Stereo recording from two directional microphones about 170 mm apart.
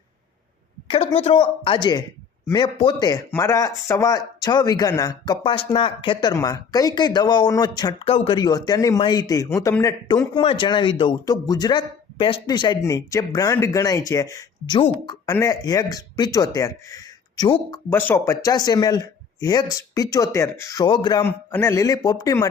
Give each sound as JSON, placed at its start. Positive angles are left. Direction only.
{"t": 0.9, "sound": "a woman's voice", "side_deg": 35}
{"t": 8.4, "sound": "speech", "side_deg": 25}
{"t": 10.3, "sound": "speech", "side_deg": 30}
{"t": 20.8, "sound": "speech", "side_deg": 30}
{"t": 21.2, "sound": "speech", "side_deg": 15}